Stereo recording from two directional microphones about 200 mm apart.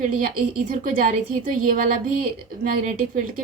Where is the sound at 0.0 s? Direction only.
45° right (ahead or behind).